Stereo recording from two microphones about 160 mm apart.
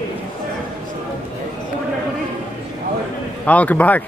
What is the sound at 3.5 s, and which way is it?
Speech, 10° left (ahead or behind).